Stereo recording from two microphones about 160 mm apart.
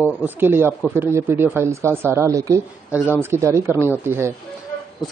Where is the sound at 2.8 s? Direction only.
10° right (ahead or behind).